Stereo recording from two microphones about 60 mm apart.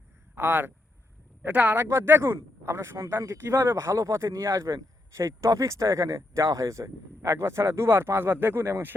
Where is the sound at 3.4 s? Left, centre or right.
Right.